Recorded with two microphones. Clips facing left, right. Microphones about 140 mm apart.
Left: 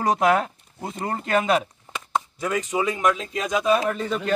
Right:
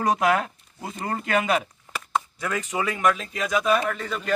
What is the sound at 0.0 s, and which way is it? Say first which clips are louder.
Speech: left 2 dB; 25° left (ahead or behind).